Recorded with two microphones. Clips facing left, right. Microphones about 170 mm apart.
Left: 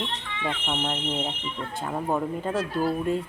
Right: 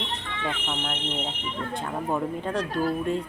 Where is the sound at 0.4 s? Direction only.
15° left (ahead or behind).